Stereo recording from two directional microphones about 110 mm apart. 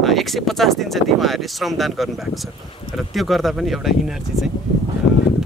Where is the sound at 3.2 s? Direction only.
Centre (ahead or behind).